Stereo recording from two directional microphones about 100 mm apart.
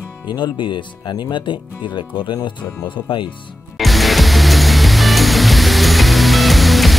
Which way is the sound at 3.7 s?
Centre (ahead or behind).